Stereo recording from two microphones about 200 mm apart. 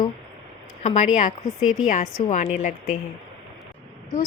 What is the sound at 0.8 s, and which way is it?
Speech, 35° left (ahead or behind).